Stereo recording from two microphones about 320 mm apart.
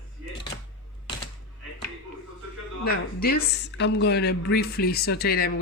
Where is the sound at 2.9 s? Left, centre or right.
Left.